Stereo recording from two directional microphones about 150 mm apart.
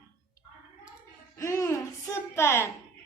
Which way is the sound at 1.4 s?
20° left (ahead or behind).